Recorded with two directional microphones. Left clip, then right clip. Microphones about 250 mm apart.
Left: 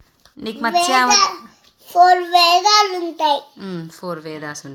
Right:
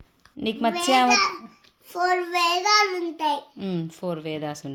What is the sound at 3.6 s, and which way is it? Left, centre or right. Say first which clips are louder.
Speech: left 1 dB; right.